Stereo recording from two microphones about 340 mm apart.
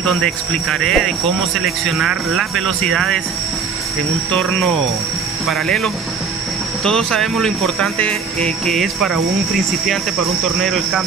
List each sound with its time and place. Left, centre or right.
0.0 s speech: centre
4.3 s speech: centre
10.6 s speech: centre